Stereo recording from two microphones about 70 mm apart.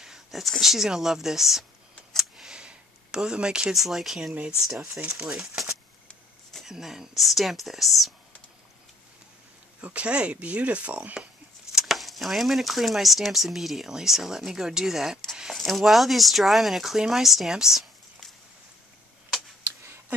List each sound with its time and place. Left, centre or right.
0.0 s speech: centre
2.1 s a sound: centre
3.7 s speech: centre
9.8 s speech: centre
11.7 s speech: centre